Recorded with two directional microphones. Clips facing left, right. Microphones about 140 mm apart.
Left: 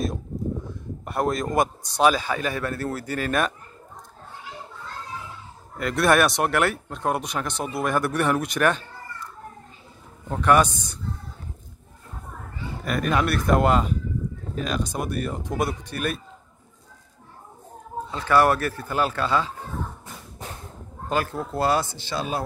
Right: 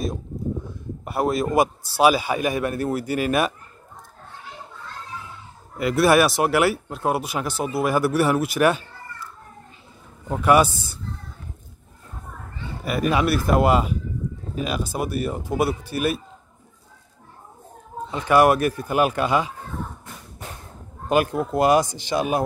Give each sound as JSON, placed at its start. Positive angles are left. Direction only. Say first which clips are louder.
{"t": 1.0, "sound": "a man's voice", "louder": "right 2 dB", "side_deg": -5}
{"t": 5.8, "sound": "a man's voice", "louder": "right 3 dB", "side_deg": -5}
{"t": 12.8, "sound": "a man's voice", "louder": "right 2 dB", "side_deg": -5}
{"t": 18.1, "sound": "a man's voice", "louder": "right 3 dB", "side_deg": -15}
{"t": 21.1, "sound": "a man's voice", "louder": "right 6 dB", "side_deg": -15}